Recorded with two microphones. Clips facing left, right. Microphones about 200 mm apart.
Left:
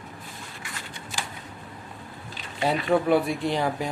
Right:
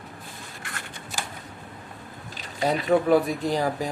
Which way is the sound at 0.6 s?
55° right (ahead or behind).